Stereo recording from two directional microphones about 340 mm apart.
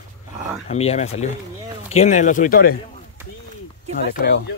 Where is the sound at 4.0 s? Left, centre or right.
Left.